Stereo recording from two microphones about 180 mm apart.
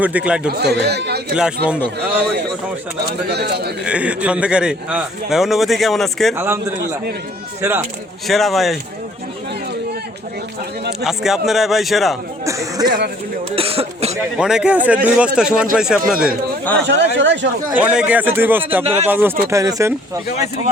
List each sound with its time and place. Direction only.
0.0 s speech: 5° right (ahead or behind)
0.5 s speech: 65° right (ahead or behind)
1.3 s a man's voice: 5° right (ahead or behind)
2.0 s speech: 65° right (ahead or behind)
3.8 s a man's voice: 5° right (ahead or behind)
6.3 s speech: 10° right (ahead or behind)
7.6 s speech: 10° right (ahead or behind)
8.3 s a man's voice: centre (ahead or behind)
11.0 s a man's voice: centre (ahead or behind)
12.5 s speech: 20° right (ahead or behind)
13.6 s speech: 30° right (ahead or behind)
14.3 s a man's voice: 5° right (ahead or behind)
17.2 s speech: 90° right
17.7 s speech: 10° right (ahead or behind)